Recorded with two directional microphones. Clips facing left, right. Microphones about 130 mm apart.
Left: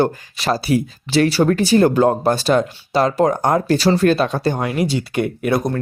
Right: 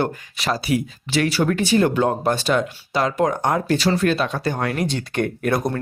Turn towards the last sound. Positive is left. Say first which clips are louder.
# left 2 dB
turn(degrees=0)  # may be behind; listen again after turning